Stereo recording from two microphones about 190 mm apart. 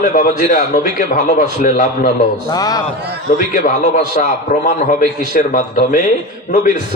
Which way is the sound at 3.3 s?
45° left (ahead or behind).